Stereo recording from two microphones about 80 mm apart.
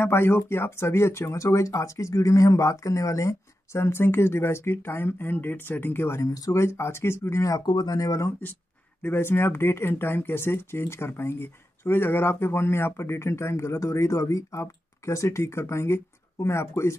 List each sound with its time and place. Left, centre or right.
0.0 s speech: left
6.2 s speech: left
7.6 s speech: left
7.9 s speech: left
9.0 s speech: left